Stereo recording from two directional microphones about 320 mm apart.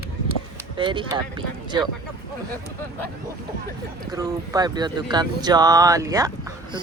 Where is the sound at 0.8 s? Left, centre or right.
Centre.